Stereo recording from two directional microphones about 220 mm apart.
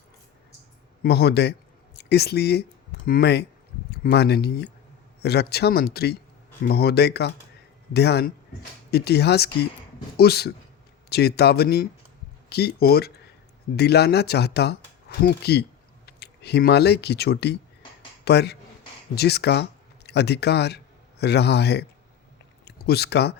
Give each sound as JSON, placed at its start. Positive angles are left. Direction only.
{"t": 1.0, "sound": "speech", "side_deg": 45}